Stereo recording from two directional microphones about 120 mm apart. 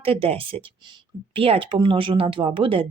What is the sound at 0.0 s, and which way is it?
Speech, 55° right (ahead or behind).